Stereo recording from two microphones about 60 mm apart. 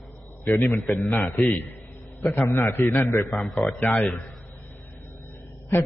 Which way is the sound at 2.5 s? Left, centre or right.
Left.